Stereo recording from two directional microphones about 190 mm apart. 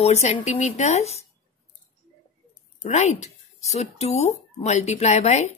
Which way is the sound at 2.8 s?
40° left (ahead or behind).